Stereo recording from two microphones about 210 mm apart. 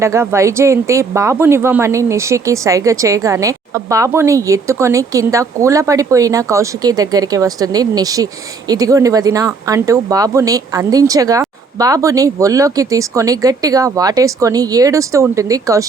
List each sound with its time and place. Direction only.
0.0 s speech: 10° right (ahead or behind)